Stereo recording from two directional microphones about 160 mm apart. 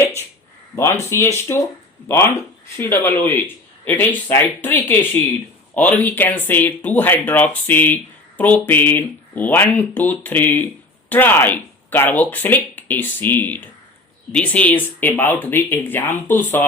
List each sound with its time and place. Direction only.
0.8 s speech: 15° left (ahead or behind)